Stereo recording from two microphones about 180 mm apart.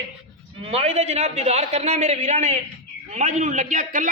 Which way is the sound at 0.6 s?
35° right (ahead or behind).